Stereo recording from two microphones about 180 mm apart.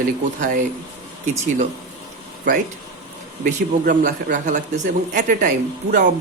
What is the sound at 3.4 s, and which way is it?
A man's voice, 45° right (ahead or behind).